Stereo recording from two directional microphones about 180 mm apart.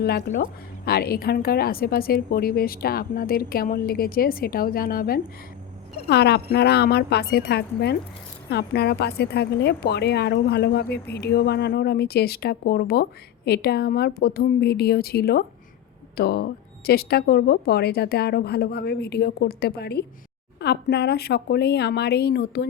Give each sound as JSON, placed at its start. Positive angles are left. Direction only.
{"t": 0.0, "sound": "a woman's voice", "side_deg": 60}
{"t": 6.1, "sound": "a woman's voice", "side_deg": 65}